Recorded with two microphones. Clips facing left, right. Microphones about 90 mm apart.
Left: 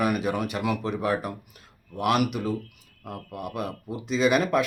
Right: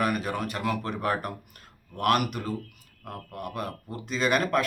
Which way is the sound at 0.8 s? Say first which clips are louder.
Left 2 dB; 50° right (ahead or behind).